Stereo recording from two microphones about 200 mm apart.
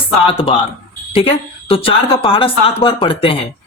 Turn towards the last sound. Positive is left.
turn(degrees=25)  # may be behind; listen again after turning